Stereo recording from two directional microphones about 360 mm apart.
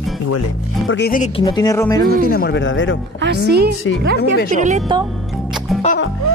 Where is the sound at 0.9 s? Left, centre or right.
Left; by 2.0 s centre.